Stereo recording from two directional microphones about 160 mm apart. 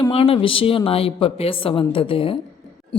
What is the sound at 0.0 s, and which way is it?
A woman's voice, 35° left (ahead or behind).